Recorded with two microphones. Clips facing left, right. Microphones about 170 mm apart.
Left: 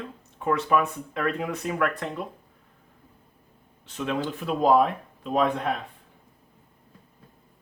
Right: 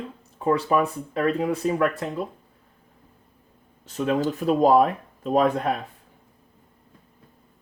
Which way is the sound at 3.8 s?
40° right (ahead or behind).